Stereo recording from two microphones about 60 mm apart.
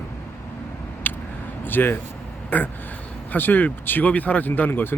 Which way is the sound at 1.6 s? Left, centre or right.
Left.